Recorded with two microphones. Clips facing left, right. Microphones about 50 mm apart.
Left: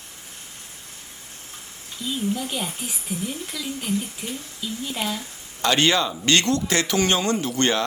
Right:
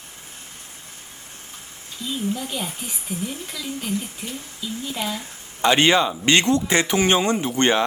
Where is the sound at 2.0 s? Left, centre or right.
Centre.